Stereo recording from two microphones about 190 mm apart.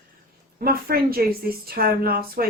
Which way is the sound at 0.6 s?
50° right (ahead or behind).